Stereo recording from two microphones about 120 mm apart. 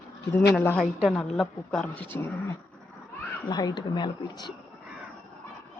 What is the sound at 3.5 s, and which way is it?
Speech, 35° left (ahead or behind).